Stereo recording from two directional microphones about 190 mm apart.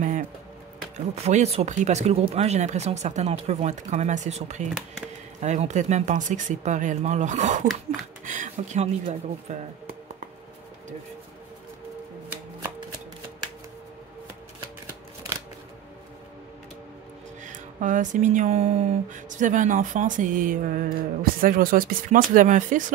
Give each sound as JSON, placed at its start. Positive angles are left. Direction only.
{"t": 0.9, "sound": "speech", "side_deg": -35}
{"t": 17.5, "sound": "speech", "side_deg": -40}